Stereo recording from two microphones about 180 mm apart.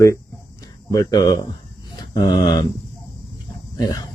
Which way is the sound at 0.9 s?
20° left (ahead or behind).